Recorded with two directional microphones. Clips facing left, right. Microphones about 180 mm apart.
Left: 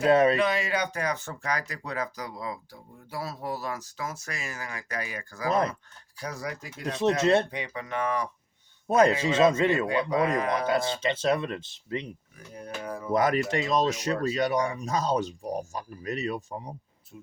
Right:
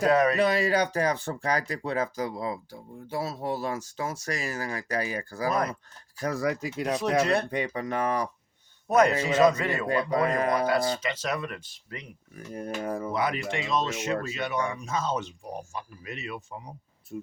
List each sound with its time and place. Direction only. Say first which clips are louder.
0.1 s speech: left 3 dB; 25° left (ahead or behind)
0.3 s speech: right 3 dB; 40° right (ahead or behind)
5.5 s speech: left 2 dB; 25° left (ahead or behind)
6.1 s speech: right 7 dB; 55° right (ahead or behind); by 6.8 s 70° right (ahead or behind)
7.0 s speech: left 4 dB; 25° left (ahead or behind)
7.5 s speech: right 4 dB; 45° right (ahead or behind)
8.9 s speech: even; 30° left (ahead or behind)
10.1 s speech: right 1 dB; 45° right (ahead or behind)
10.7 s speech: even; 25° left (ahead or behind)
12.5 s speech: right 4 dB; 50° right (ahead or behind)
13.1 s speech: left 8 dB; 45° left (ahead or behind)